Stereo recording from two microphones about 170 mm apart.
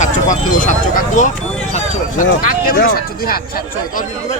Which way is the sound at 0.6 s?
50° left (ahead or behind).